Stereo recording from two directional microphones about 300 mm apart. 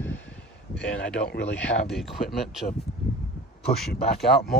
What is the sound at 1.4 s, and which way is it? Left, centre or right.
Speech, centre.